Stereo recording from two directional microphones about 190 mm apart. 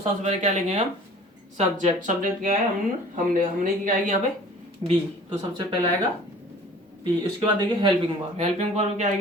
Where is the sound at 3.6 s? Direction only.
45° right (ahead or behind).